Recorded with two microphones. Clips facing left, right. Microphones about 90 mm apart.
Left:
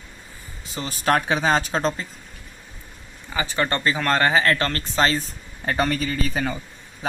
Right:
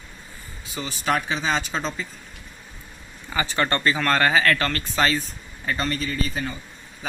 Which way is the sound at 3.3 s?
15° left (ahead or behind).